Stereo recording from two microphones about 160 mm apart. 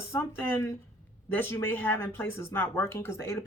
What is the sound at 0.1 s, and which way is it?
Speech, 15° left (ahead or behind).